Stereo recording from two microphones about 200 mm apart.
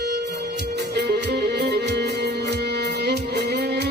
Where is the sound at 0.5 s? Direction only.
55° right (ahead or behind).